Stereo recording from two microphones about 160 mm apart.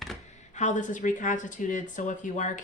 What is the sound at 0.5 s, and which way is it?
Speech, 50° left (ahead or behind).